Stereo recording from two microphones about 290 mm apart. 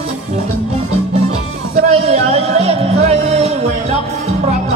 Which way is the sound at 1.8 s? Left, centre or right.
Right.